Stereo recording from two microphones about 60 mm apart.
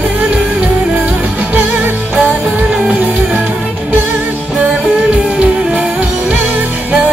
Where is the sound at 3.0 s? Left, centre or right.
Right.